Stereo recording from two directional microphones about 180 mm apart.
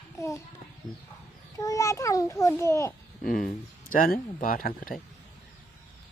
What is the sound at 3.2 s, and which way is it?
Speech, 50° left (ahead or behind).